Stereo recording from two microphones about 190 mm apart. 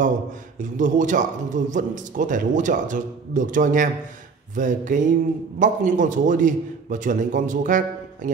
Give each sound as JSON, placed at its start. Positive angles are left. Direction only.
{"t": 0.6, "sound": "a man's voice", "side_deg": -40}